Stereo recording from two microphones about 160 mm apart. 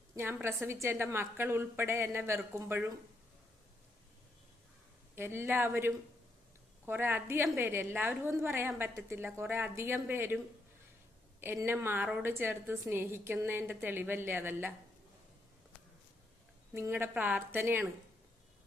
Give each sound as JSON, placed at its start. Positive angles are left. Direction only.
{"t": 0.4, "sound": "a woman's voice", "side_deg": -15}
{"t": 5.1, "sound": "a woman's voice", "side_deg": -15}
{"t": 16.7, "sound": "a woman's voice", "side_deg": -15}